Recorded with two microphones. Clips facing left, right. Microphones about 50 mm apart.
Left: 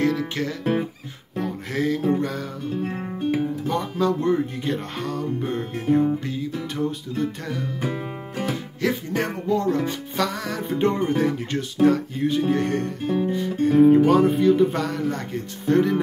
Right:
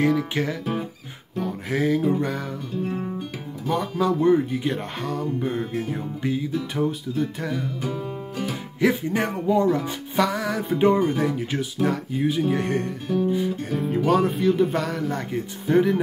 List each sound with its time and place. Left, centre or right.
0.0 s music: centre
2.8 s music: left
3.6 s speech: centre
8.8 s music: centre
13.0 s music: left
13.3 s music: centre
13.7 s speech: centre